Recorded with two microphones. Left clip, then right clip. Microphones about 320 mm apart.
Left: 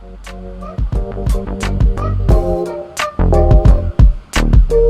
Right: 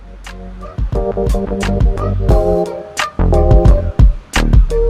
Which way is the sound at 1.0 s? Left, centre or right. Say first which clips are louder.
Right 8 dB; centre.